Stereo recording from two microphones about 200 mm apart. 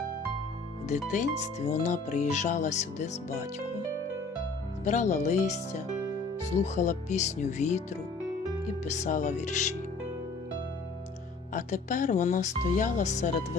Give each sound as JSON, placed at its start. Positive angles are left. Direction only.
{"t": 0.9, "sound": "speech", "side_deg": 35}
{"t": 4.9, "sound": "speech", "side_deg": 35}
{"t": 6.6, "sound": "speech", "side_deg": 35}
{"t": 8.8, "sound": "speech", "side_deg": 35}
{"t": 11.5, "sound": "speech", "side_deg": 40}